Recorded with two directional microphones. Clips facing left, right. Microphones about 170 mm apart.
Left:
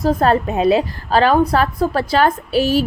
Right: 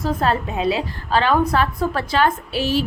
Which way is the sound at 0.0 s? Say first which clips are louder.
Left 5 dB; 40° left (ahead or behind).